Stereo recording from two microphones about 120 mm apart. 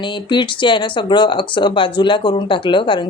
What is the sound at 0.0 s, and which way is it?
Speech, 40° left (ahead or behind).